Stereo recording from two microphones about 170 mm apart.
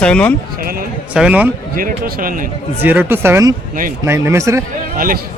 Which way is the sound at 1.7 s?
55° right (ahead or behind).